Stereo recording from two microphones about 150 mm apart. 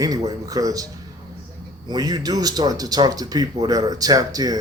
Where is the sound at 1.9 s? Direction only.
25° right (ahead or behind).